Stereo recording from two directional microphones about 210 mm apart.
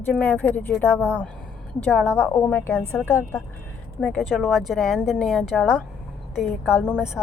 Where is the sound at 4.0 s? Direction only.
Centre (ahead or behind).